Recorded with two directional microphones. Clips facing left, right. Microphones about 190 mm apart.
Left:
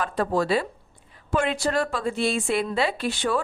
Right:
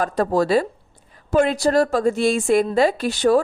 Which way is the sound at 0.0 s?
40° right (ahead or behind).